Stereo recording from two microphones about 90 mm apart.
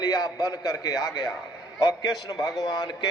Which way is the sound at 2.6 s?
50° left (ahead or behind).